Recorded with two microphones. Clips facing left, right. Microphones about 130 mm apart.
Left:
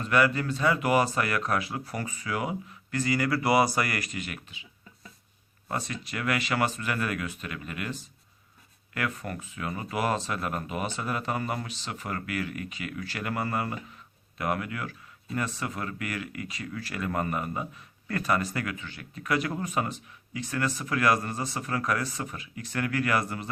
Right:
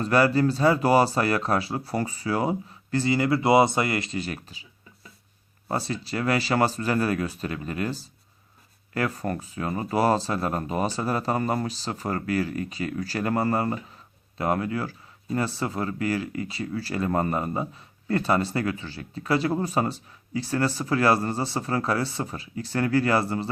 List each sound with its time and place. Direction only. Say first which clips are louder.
0.0 s speech: right 5 dB; 35° right (ahead or behind)
5.6 s speech: right 5 dB; 30° right (ahead or behind)